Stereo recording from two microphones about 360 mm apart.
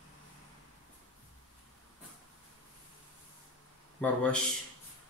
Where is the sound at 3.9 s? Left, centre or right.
Centre.